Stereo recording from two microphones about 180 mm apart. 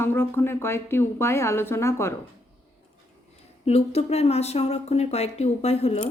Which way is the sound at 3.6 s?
35° left (ahead or behind).